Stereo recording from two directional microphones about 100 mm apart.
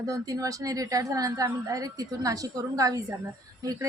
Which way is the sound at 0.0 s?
35° right (ahead or behind).